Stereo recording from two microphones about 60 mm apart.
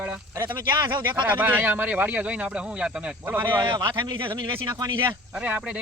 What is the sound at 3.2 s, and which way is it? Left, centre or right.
Speech, right.